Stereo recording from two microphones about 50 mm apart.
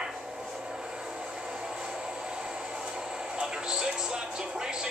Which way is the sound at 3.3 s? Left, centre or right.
Centre.